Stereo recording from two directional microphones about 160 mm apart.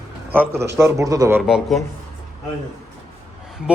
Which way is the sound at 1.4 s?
5° right (ahead or behind).